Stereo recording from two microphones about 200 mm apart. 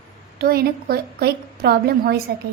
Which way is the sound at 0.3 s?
50° right (ahead or behind).